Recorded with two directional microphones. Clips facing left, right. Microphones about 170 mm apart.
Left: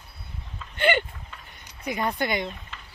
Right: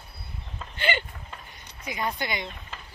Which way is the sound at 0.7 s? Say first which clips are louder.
Left 6 dB; 55° left (ahead or behind).